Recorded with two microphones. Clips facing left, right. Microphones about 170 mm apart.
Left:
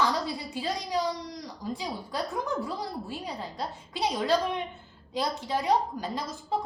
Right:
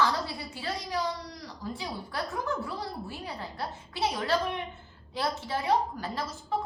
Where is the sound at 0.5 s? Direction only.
20° left (ahead or behind).